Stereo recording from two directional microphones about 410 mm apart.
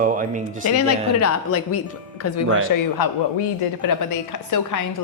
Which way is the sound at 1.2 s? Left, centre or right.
Left.